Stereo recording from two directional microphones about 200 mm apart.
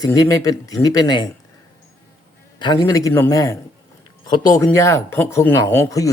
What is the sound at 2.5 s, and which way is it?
Speech, 20° left (ahead or behind).